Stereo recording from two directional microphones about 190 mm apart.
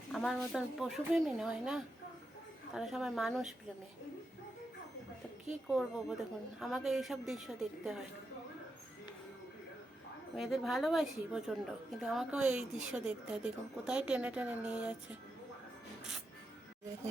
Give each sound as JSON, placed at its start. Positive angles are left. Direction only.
{"t": 0.1, "sound": "a woman's voice", "side_deg": 0}
{"t": 5.5, "sound": "a woman's voice", "side_deg": -5}
{"t": 10.3, "sound": "a woman's voice", "side_deg": 0}